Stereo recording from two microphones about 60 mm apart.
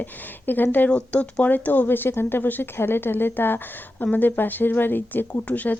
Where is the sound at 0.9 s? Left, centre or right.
Centre.